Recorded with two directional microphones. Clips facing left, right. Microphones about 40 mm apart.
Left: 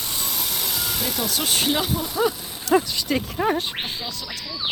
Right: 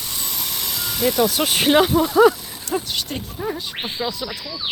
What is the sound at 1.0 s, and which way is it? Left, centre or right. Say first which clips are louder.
Speech: right 10 dB; right.